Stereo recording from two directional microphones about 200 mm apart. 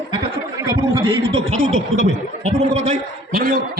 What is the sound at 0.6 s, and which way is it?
Speech, 25° right (ahead or behind).